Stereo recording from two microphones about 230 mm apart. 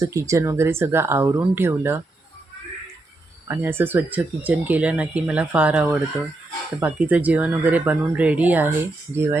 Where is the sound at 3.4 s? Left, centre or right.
Centre.